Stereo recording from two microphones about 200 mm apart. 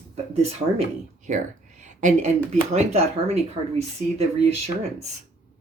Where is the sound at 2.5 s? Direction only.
35° right (ahead or behind).